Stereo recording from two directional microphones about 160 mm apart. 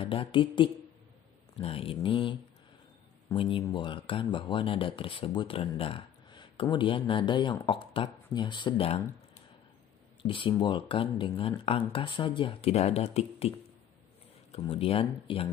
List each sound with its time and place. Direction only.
0.0 s speech: 35° left (ahead or behind)
3.3 s speech: 30° left (ahead or behind)
10.2 s speech: 30° left (ahead or behind)
14.5 s speech: 35° left (ahead or behind)